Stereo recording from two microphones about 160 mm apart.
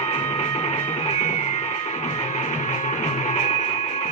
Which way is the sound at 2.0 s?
45° left (ahead or behind).